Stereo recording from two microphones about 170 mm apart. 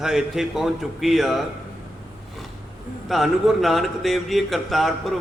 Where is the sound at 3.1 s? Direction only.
Centre (ahead or behind).